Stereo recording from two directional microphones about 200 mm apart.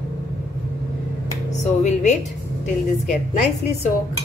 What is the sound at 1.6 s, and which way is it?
Speech, 35° left (ahead or behind).